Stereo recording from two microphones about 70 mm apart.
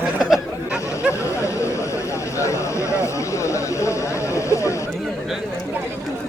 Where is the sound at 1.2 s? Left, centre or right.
Left.